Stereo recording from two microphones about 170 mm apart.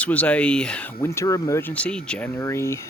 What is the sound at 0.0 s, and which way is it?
Speech, 10° left (ahead or behind).